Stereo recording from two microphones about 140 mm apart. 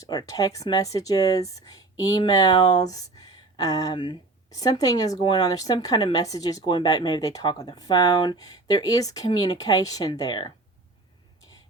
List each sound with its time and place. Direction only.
0.0 s speech: 25° left (ahead or behind)